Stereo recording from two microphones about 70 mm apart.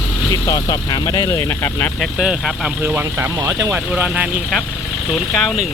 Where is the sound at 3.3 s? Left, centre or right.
Right.